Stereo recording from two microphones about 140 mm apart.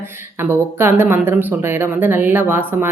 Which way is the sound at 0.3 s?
15° right (ahead or behind).